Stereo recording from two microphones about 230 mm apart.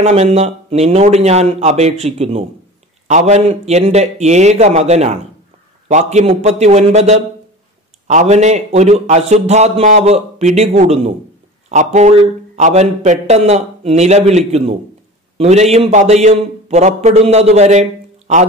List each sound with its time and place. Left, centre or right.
0.0 s a man's voice: right